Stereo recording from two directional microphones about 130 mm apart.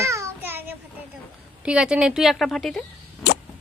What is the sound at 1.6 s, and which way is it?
A woman's voice, 5° right (ahead or behind).